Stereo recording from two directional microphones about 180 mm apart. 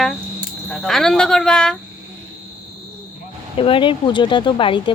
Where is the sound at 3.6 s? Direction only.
30° left (ahead or behind).